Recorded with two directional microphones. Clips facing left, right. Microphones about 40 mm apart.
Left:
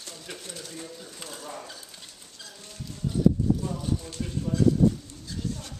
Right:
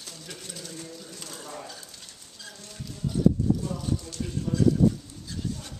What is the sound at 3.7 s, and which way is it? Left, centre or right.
Speech, centre.